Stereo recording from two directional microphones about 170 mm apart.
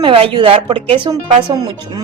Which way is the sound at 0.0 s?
30° right (ahead or behind).